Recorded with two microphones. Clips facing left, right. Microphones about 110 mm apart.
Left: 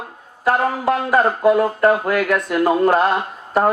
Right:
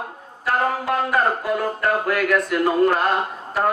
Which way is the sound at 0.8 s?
35° left (ahead or behind).